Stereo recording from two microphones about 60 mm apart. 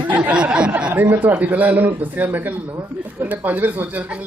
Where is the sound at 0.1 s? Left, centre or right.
Centre.